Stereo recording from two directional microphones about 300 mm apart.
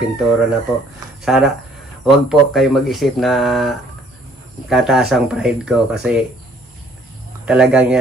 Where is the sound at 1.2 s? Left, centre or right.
Centre.